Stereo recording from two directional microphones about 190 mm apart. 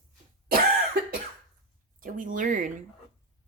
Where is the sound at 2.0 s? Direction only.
45° right (ahead or behind).